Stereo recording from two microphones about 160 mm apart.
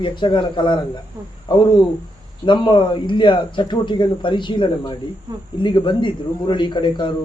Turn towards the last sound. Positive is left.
turn(degrees=30)  # may be behind; listen again after turning